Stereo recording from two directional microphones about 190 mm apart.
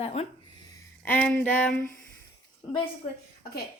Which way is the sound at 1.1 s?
10° left (ahead or behind).